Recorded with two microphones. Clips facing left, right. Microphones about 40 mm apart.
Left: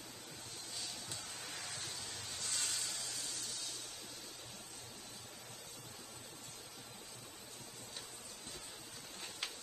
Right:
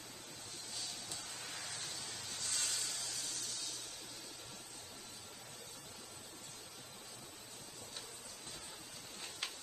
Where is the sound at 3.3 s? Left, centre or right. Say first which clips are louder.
Even; centre.